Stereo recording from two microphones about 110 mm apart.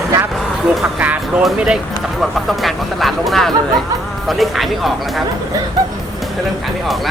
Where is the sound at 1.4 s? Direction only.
5° right (ahead or behind).